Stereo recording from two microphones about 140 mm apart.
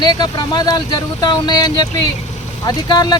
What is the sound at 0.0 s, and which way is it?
Speech, 35° left (ahead or behind).